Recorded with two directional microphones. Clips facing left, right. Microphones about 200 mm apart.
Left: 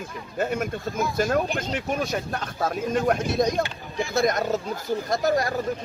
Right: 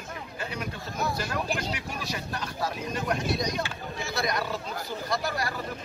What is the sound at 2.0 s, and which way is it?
A man's voice, 50° left (ahead or behind).